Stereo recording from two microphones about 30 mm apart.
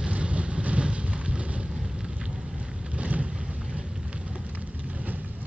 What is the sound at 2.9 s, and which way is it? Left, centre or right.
Boat, right.